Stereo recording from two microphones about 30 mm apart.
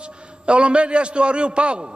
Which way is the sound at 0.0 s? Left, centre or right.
Right.